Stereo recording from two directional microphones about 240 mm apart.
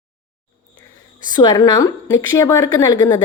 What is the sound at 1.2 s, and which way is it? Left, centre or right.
A woman's voice, centre.